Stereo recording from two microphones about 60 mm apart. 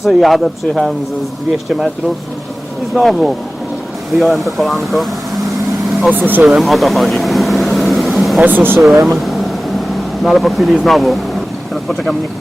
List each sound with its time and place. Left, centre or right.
0.0 s speech: centre
2.9 s speech: centre
6.0 s speech: right
6.4 s vehicle: centre
8.4 s speech: right
8.8 s speech: centre
11.7 s vehicle: centre